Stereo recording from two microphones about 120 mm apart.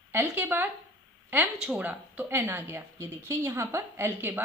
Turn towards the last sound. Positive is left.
turn(degrees=-20)  # may be behind; listen again after turning